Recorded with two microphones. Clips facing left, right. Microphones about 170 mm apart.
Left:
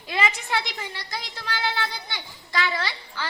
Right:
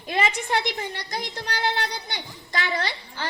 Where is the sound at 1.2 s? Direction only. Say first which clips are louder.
Right 3 dB; 20° right (ahead or behind).